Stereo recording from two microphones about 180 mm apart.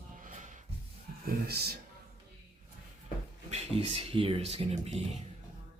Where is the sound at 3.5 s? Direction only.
35° right (ahead or behind).